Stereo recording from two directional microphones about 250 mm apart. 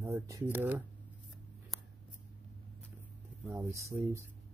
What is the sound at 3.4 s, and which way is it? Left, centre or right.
Speech, centre.